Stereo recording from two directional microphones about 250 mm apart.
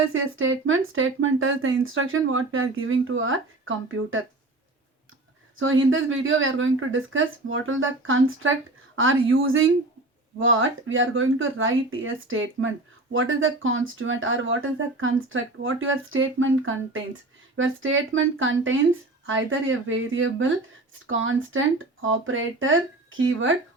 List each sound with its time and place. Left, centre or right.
0.1 s speech: right
5.5 s speech: right